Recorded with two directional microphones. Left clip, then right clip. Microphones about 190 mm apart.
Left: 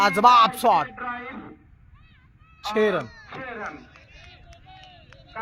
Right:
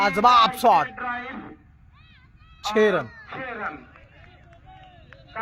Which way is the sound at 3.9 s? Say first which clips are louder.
Left 2 dB; 25° left (ahead or behind).